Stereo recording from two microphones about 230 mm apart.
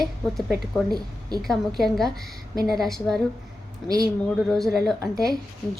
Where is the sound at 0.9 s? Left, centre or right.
Centre.